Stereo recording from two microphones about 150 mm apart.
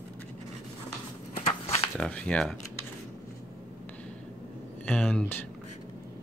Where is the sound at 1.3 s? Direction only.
40° left (ahead or behind).